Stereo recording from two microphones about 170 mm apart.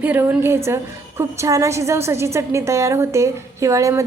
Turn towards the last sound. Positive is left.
turn(degrees=-20)  # may be behind; listen again after turning